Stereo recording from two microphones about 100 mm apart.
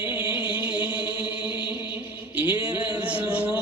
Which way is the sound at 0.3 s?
55° left (ahead or behind).